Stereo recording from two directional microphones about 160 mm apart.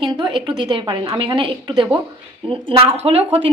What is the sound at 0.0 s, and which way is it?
A woman's voice, 30° right (ahead or behind).